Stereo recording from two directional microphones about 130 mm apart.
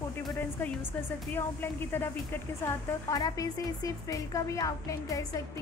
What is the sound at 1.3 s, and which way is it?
A woman's voice, 15° left (ahead or behind).